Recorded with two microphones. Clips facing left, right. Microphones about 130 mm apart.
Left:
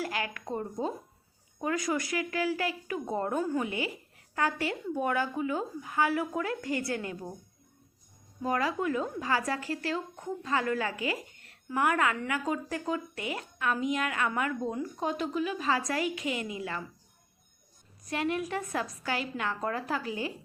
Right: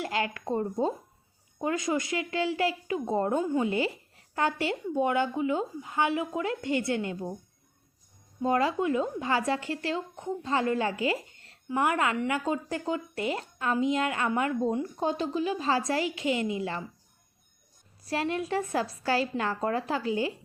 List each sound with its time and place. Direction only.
0.0 s a woman's voice: 25° right (ahead or behind)
8.4 s a woman's voice: 25° right (ahead or behind)
18.0 s a woman's voice: 30° right (ahead or behind)